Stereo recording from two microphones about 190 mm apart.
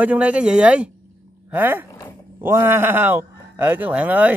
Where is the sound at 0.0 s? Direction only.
5° right (ahead or behind).